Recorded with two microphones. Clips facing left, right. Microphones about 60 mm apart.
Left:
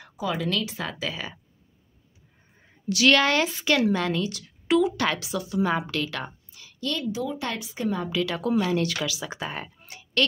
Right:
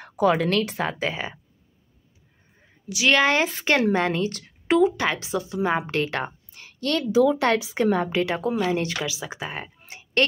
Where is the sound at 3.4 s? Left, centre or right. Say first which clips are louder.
Right 1 dB; right.